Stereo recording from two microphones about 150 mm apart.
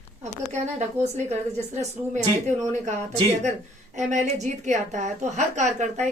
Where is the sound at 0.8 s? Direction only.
50° right (ahead or behind).